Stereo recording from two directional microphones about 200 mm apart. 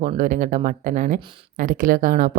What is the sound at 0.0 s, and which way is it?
Speech, 40° right (ahead or behind).